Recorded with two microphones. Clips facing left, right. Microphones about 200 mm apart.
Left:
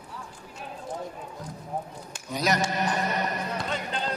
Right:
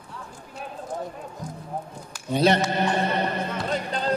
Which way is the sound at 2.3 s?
30° right (ahead or behind).